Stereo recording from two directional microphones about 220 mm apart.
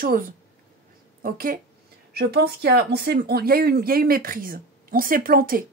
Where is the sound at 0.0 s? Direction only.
40° right (ahead or behind).